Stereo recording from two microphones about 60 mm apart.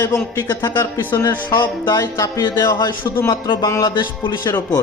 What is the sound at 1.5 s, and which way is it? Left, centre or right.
Music, left.